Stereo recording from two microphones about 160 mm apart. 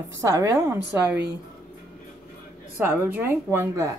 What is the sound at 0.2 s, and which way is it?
A woman's voice, 20° right (ahead or behind).